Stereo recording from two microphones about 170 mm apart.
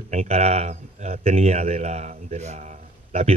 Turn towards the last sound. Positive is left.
turn(degrees=-40)  # may be behind; listen again after turning